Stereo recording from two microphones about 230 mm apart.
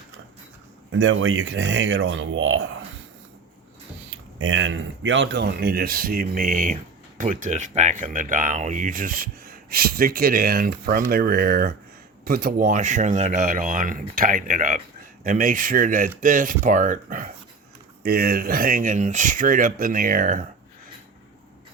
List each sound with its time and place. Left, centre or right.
0.9 s speech: right
4.4 s speech: right